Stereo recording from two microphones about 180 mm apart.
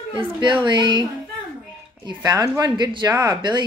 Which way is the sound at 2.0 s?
20° right (ahead or behind).